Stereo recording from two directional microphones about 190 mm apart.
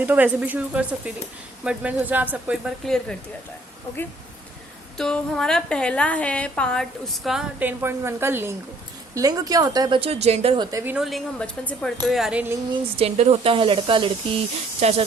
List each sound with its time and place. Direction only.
0.0 s a woman's voice: 10° right (ahead or behind)
4.9 s a woman's voice: 5° left (ahead or behind); by 10.5 s 35° right (ahead or behind)
10.6 s speech: 15° right (ahead or behind)
10.9 s a woman's voice: centre (ahead or behind)
12.7 s speech: 35° right (ahead or behind)